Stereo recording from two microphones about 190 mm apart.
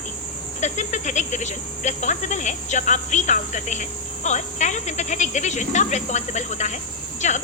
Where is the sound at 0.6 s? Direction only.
40° left (ahead or behind).